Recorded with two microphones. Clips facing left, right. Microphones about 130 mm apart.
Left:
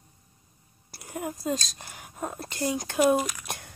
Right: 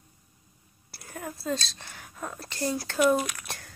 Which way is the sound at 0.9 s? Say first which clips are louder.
Left 4 dB; 20° left (ahead or behind).